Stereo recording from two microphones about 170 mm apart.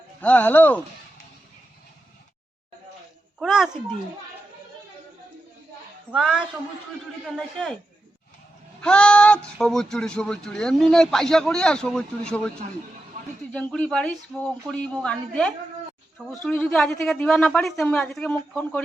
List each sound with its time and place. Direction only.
0.2 s speech: 10° left (ahead or behind)
3.3 s a child's voice: centre (ahead or behind)
6.1 s speech: 5° right (ahead or behind)
8.8 s speech: 5° left (ahead or behind)
13.2 s a sound: 45° right (ahead or behind)
13.5 s speech: 5° left (ahead or behind)